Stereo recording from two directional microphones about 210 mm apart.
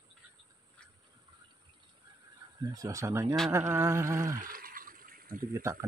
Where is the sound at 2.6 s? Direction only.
15° right (ahead or behind).